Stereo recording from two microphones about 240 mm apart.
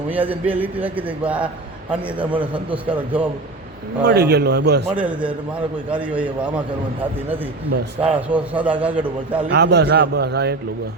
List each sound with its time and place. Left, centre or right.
0.1 s a man's voice: centre
2.4 s a man's voice: right
4.0 s a man's voice: right
4.9 s a man's voice: centre
8.0 s a man's voice: centre
9.5 s a man's voice: right